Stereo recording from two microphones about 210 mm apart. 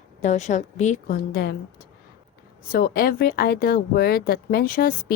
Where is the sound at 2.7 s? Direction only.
45° left (ahead or behind).